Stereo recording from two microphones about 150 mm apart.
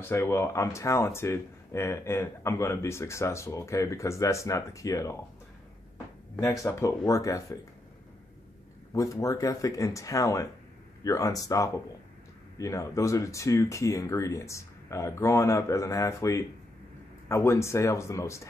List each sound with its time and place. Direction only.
0.0 s speech: 15° left (ahead or behind)
6.4 s speech: 20° left (ahead or behind)
8.9 s speech: 20° left (ahead or behind)